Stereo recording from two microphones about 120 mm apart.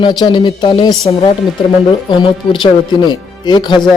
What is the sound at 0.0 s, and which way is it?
Speech, 40° left (ahead or behind).